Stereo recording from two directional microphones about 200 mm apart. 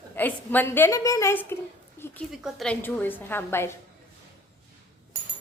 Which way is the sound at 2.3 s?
Centre (ahead or behind).